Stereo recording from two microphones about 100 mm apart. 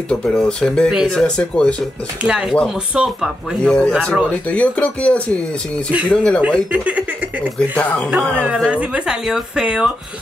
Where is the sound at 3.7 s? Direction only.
5° left (ahead or behind).